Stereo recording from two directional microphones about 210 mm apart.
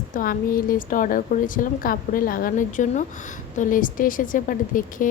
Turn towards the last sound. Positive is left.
turn(degrees=40)  # may be behind; listen again after turning